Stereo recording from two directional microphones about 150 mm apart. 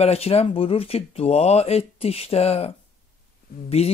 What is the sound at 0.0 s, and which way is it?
Speech, 45° left (ahead or behind).